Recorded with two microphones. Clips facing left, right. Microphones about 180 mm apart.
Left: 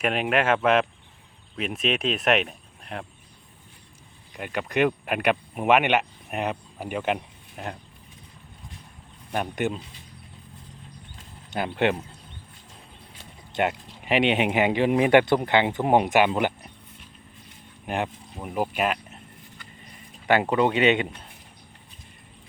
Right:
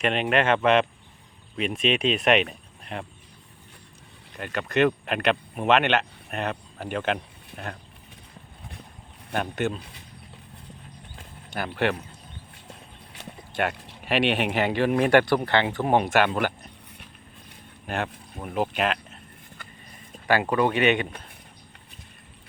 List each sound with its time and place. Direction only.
0.0 s speech: 5° left (ahead or behind)
4.4 s speech: 15° left (ahead or behind)
9.3 s speech: 15° left (ahead or behind)
11.5 s speech: 20° left (ahead or behind)
13.5 s speech: 20° left (ahead or behind)
17.8 s speech: 15° left (ahead or behind)
20.2 s speech: 20° left (ahead or behind)